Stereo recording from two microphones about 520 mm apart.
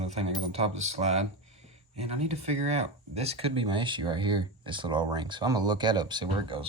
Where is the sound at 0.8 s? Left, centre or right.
Centre.